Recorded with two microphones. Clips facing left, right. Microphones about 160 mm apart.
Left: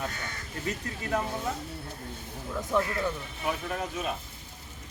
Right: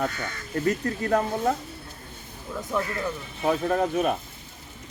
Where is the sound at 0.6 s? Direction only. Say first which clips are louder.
Right 9 dB; 60° right (ahead or behind).